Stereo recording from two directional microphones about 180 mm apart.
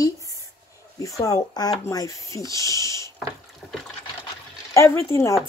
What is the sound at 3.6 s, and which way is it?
Water, centre (ahead or behind).